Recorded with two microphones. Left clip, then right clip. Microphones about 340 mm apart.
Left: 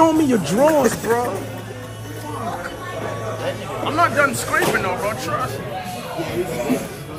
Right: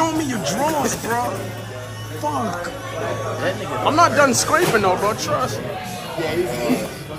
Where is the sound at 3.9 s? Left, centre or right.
Centre.